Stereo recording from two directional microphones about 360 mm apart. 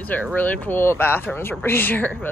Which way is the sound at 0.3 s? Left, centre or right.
Centre.